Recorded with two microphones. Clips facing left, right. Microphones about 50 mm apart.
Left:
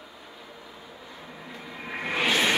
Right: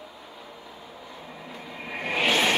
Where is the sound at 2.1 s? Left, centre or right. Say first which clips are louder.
Right 1 dB; centre.